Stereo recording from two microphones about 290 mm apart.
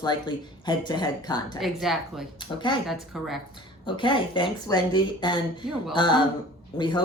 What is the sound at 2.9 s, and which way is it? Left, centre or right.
Speech, centre.